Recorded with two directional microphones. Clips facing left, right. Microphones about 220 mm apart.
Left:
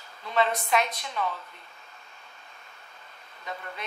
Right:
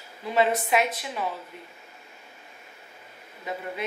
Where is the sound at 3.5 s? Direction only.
10° right (ahead or behind).